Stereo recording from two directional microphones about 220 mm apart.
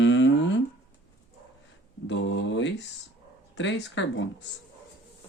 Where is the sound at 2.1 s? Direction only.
55° left (ahead or behind).